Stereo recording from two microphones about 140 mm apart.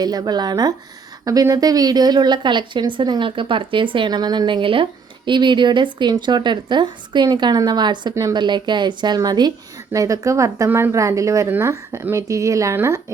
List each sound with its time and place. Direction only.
0.0 s a woman's voice: 30° right (ahead or behind)